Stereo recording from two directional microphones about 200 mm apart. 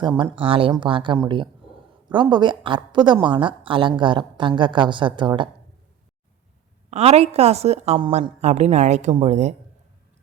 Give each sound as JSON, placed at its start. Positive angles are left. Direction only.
{"t": 0.0, "sound": "a woman's voice", "side_deg": -25}
{"t": 6.9, "sound": "a woman's voice", "side_deg": -30}
{"t": 8.4, "sound": "a woman's voice", "side_deg": -35}